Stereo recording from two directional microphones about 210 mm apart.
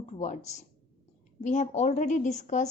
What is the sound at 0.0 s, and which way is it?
A woman's voice, 35° left (ahead or behind).